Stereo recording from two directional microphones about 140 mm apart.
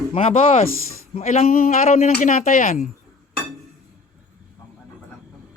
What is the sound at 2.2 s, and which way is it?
Speech, 70° left (ahead or behind).